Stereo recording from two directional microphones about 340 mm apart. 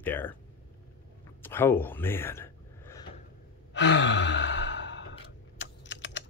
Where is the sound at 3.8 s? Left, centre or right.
Left.